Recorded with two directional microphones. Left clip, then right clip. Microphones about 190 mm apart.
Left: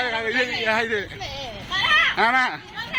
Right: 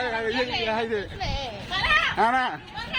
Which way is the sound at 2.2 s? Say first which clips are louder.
Left 3 dB; 10° right (ahead or behind).